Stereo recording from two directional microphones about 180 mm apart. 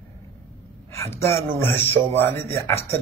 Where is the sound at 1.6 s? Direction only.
10° left (ahead or behind).